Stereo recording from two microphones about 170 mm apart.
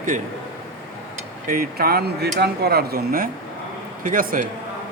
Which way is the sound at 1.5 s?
60° right (ahead or behind).